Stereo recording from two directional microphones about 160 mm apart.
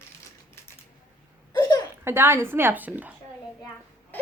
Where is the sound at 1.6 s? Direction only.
25° left (ahead or behind).